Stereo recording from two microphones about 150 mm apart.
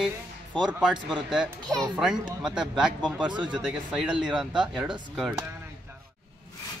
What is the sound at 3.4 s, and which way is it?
Speech, 5° right (ahead or behind).